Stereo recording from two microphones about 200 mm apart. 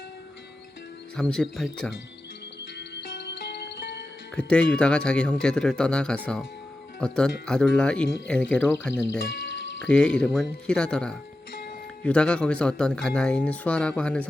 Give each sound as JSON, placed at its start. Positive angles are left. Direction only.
{"t": 1.1, "sound": "speech", "side_deg": 5}
{"t": 2.7, "sound": "music", "side_deg": 55}
{"t": 4.4, "sound": "speech", "side_deg": 5}